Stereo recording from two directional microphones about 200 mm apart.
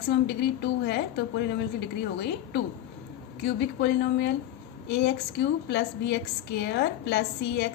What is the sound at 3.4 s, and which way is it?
A woman's voice, 60° left (ahead or behind).